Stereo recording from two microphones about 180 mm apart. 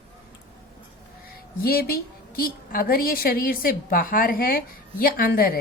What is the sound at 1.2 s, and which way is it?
A woman's voice, 55° left (ahead or behind).